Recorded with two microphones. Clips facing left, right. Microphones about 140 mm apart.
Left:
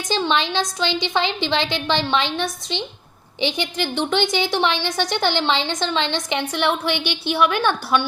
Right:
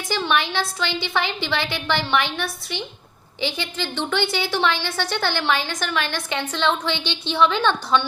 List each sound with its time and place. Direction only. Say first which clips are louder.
0.1 s a woman's voice: left 2 dB; 20° left (ahead or behind)